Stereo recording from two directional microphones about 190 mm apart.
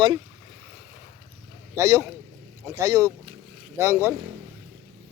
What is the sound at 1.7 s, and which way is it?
Speech, 15° right (ahead or behind).